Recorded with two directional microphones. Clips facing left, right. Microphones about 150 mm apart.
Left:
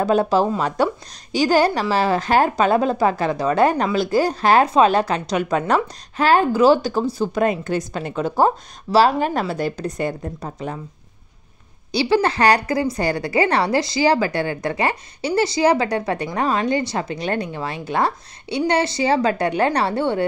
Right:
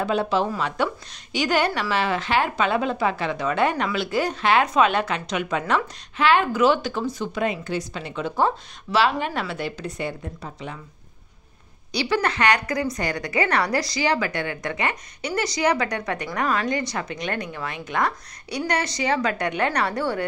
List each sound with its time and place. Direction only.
0.0 s a woman's voice: 40° left (ahead or behind)
11.9 s a woman's voice: 30° left (ahead or behind)